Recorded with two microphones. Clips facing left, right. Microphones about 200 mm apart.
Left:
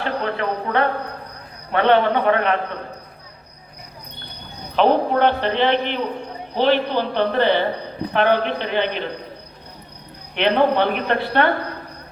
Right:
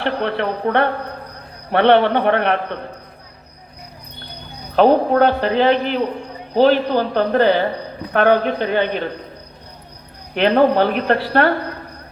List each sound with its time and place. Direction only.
0.0 s a man's voice: 65° right (ahead or behind)
4.7 s a woman's voice: 45° right (ahead or behind)
10.3 s a woman's voice: 40° right (ahead or behind)